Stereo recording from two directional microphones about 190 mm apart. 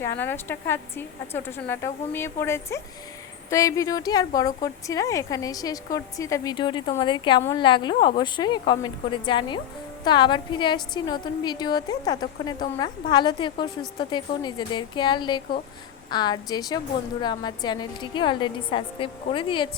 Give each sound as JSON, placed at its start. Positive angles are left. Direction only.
{"t": 0.0, "sound": "a woman's voice", "side_deg": 10}